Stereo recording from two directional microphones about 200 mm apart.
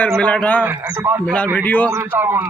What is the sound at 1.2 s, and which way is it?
Speech, 5° left (ahead or behind).